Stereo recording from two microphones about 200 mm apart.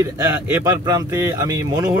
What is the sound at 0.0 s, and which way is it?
Speech, 15° right (ahead or behind).